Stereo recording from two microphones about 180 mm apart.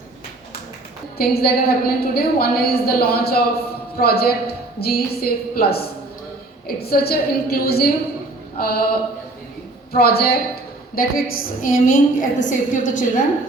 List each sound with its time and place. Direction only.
1.2 s a woman's voice: 60° left (ahead or behind)
9.9 s a woman's voice: 60° left (ahead or behind)